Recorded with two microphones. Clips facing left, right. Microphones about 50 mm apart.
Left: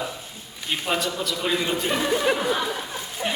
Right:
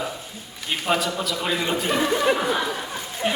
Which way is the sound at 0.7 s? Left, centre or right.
Centre.